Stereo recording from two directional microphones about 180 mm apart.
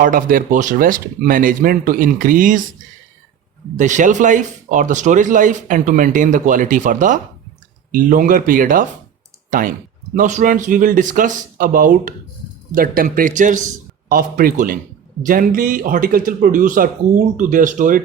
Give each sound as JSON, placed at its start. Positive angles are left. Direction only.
{"t": 0.0, "sound": "speech", "side_deg": -50}
{"t": 3.8, "sound": "speech", "side_deg": -45}